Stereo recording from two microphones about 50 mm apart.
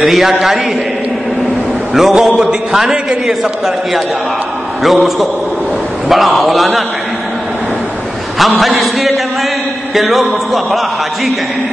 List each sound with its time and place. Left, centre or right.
0.0 s speech: centre
2.0 s speech: centre
2.2 s a man's voice: centre
8.4 s speech: centre